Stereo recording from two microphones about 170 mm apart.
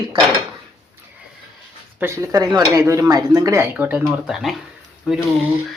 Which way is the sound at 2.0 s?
15° right (ahead or behind).